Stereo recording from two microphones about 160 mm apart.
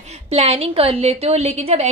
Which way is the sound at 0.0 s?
40° right (ahead or behind).